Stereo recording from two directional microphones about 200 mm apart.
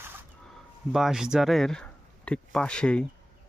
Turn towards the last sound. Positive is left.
turn(degrees=5)  # may be behind; listen again after turning